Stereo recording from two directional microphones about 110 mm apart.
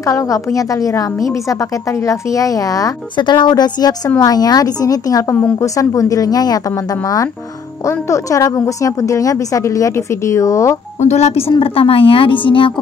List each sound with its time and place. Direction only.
0.0 s a woman's voice: 30° left (ahead or behind)
3.2 s a woman's voice: 45° left (ahead or behind)
11.0 s a woman's voice: 90° left
11.6 s a woman's voice: 60° left (ahead or behind)